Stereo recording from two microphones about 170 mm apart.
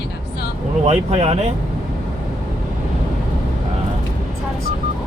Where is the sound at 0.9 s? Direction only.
40° right (ahead or behind).